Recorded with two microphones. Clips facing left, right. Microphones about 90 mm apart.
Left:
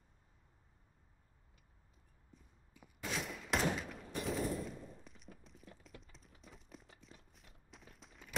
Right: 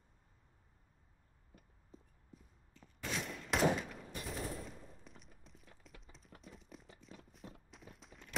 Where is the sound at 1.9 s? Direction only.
35° right (ahead or behind).